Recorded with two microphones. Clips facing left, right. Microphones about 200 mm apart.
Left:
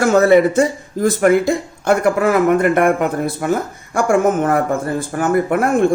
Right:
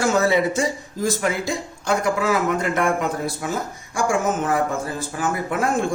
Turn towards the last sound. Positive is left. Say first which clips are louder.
# left 7 dB
turn(degrees=55)  # may be behind; listen again after turning